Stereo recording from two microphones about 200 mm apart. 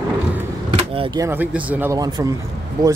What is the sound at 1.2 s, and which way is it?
Speech, 10° right (ahead or behind).